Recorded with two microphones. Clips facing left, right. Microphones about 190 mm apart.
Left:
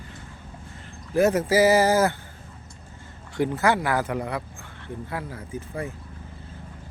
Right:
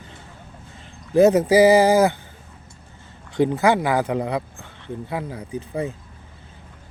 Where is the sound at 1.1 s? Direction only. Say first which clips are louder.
Right 6 dB; 20° right (ahead or behind).